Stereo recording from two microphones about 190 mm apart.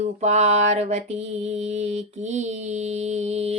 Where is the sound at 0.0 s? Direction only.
35° right (ahead or behind).